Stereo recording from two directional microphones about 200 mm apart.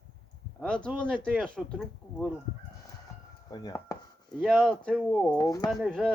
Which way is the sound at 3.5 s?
20° left (ahead or behind).